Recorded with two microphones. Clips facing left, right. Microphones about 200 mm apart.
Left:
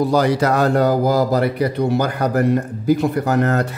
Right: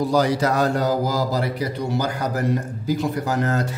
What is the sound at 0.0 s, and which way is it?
Speech, 60° left (ahead or behind).